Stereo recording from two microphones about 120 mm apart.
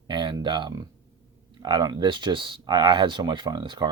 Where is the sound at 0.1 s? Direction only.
40° right (ahead or behind).